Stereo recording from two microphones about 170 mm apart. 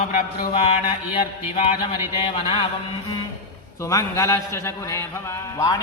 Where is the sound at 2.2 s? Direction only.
35° left (ahead or behind).